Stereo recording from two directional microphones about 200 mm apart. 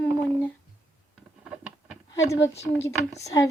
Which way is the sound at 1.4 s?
5° right (ahead or behind).